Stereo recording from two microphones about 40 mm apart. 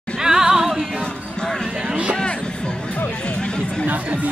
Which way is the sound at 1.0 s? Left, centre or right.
Centre.